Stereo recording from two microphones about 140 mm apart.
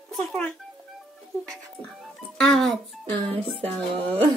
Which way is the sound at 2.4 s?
Centre (ahead or behind).